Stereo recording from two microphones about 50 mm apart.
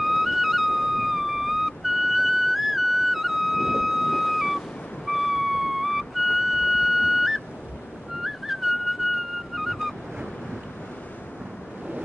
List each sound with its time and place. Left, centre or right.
0.0 s music: centre
8.2 s whistling: centre
9.0 s music: centre
9.6 s waves: centre